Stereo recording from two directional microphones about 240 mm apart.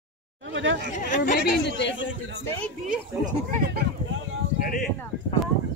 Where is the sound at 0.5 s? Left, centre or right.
Right.